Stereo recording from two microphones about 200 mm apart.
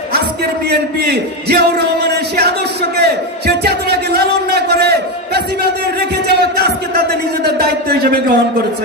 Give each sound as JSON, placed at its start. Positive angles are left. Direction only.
{"t": 0.7, "sound": "a man's voice", "side_deg": -55}